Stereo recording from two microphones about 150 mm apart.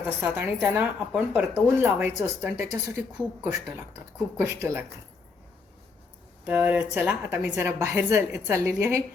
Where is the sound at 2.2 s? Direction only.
20° right (ahead or behind).